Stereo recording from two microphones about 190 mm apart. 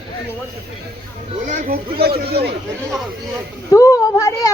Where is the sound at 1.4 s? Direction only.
45° right (ahead or behind).